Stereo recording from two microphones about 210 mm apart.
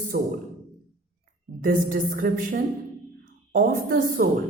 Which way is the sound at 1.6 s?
40° right (ahead or behind).